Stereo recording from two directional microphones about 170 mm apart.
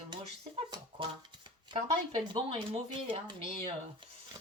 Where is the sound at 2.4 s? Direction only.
30° right (ahead or behind).